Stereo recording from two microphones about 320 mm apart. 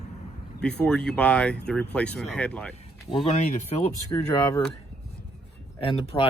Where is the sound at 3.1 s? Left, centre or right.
Centre.